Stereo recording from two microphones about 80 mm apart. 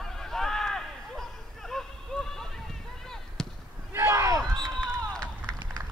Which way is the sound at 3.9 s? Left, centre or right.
Right.